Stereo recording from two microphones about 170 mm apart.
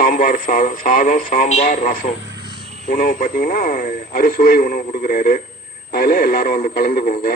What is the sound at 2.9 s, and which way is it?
Speech, 55° left (ahead or behind).